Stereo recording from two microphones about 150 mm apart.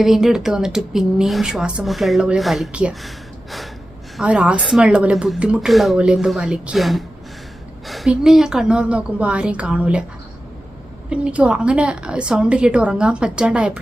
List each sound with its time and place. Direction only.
0.0 s speech: 5° right (ahead or behind)
4.2 s a woman's voice: 5° right (ahead or behind)
11.1 s a woman's voice: 5° right (ahead or behind)